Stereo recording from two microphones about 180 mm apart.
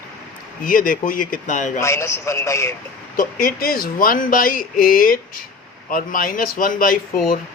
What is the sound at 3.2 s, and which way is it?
Speech, 50° left (ahead or behind).